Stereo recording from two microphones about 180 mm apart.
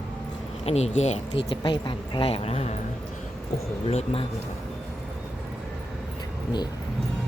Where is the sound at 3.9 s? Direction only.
35° left (ahead or behind).